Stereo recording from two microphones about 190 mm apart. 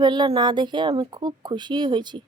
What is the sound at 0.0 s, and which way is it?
Speech, 25° right (ahead or behind).